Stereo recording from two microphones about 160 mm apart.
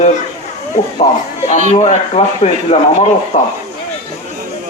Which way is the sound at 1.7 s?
40° left (ahead or behind).